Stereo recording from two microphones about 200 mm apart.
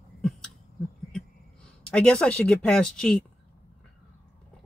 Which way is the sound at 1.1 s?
5° left (ahead or behind).